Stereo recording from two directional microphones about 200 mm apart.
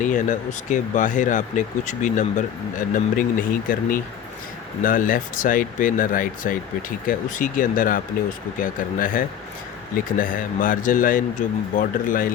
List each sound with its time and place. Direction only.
0.0 s a man's voice: 40° left (ahead or behind)